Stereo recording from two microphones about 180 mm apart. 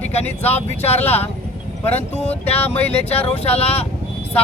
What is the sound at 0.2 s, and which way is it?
Speech, 10° left (ahead or behind).